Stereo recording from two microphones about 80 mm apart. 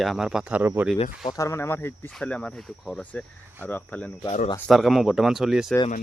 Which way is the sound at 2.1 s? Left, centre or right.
Centre.